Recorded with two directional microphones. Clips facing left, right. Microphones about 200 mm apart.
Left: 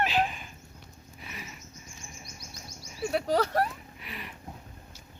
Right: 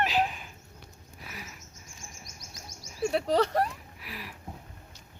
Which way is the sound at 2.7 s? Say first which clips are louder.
Left 1 dB; 45° right (ahead or behind).